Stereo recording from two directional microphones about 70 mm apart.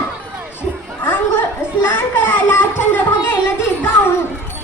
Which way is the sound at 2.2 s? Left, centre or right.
Left.